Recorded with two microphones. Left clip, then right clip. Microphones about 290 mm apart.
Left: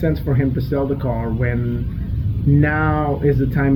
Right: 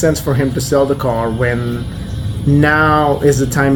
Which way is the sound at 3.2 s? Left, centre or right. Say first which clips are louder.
Right 6 dB; right.